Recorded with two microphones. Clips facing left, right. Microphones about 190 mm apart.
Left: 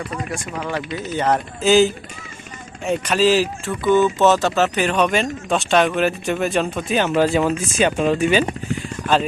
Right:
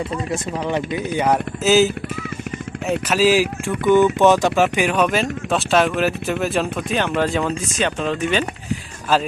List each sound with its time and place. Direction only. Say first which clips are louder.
0.5 s speech: right 3 dB; 20° right (ahead or behind); by 8.4 s 10° left (ahead or behind)